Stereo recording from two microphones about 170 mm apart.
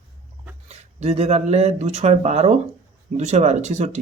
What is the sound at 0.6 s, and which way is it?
Speech, 40° right (ahead or behind).